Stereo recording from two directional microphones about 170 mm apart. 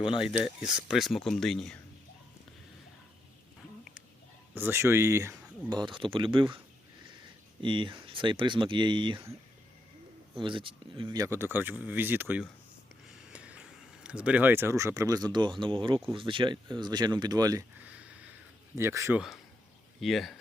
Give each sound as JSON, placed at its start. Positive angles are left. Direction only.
{"t": 0.2, "sound": "speech", "side_deg": -5}
{"t": 4.5, "sound": "speech", "side_deg": -15}
{"t": 5.7, "sound": "speech", "side_deg": -30}
{"t": 7.6, "sound": "speech", "side_deg": -30}
{"t": 10.4, "sound": "speech", "side_deg": -30}
{"t": 17.7, "sound": "a sound", "side_deg": -10}
{"t": 18.8, "sound": "speech", "side_deg": -15}
{"t": 20.0, "sound": "speech", "side_deg": 0}